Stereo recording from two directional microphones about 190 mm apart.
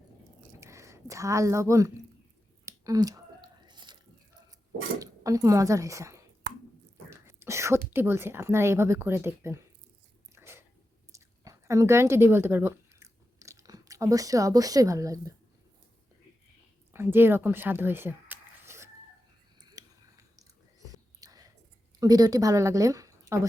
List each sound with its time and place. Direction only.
0.6 s speech: 15° right (ahead or behind)
2.6 s chewing: 20° right (ahead or behind)
4.9 s speech: 15° right (ahead or behind)
10.3 s a sound: 15° right (ahead or behind)
16.9 s speech: 10° right (ahead or behind)
19.8 s a sound: 20° right (ahead or behind)
20.3 s whispering: 20° right (ahead or behind)
22.0 s speech: 20° right (ahead or behind)